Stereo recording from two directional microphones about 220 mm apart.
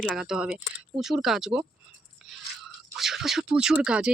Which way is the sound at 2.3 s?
Centre (ahead or behind).